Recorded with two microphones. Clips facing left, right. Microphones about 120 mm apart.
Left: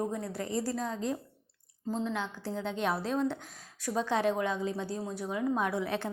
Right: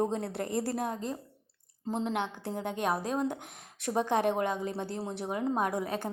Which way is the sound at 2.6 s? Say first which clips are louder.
Right 1 dB; 50° right (ahead or behind).